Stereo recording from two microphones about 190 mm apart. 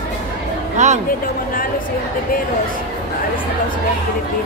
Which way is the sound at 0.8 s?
40° right (ahead or behind).